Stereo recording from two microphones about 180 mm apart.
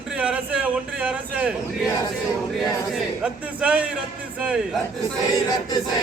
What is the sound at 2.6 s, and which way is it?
Speech, 5° right (ahead or behind).